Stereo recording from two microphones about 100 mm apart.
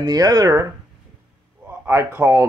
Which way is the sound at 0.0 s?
40° right (ahead or behind).